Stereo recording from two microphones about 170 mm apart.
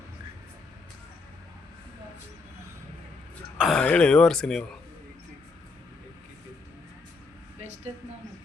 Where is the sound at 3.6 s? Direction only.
5° left (ahead or behind).